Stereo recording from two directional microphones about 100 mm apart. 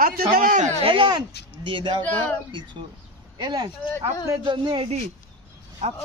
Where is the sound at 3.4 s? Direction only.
45° right (ahead or behind).